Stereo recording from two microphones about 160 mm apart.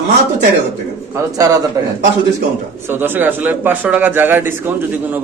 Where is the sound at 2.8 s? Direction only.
15° right (ahead or behind).